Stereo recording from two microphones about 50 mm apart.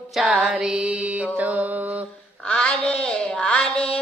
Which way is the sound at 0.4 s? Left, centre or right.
Centre.